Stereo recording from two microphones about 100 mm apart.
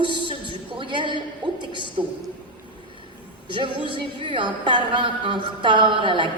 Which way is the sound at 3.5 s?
55° right (ahead or behind).